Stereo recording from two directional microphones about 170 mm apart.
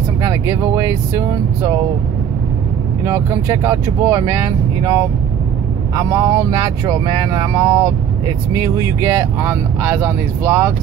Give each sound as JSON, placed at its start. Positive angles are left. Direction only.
{"t": 0.2, "sound": "speech", "side_deg": -20}
{"t": 3.1, "sound": "speech", "side_deg": -15}